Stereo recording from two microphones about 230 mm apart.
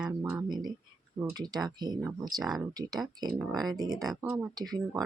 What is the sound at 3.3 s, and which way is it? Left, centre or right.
Speech, centre.